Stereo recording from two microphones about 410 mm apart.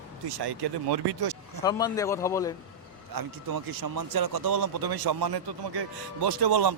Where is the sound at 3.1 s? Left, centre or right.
Right.